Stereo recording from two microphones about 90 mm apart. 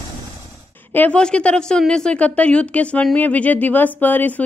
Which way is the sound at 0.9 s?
15° left (ahead or behind).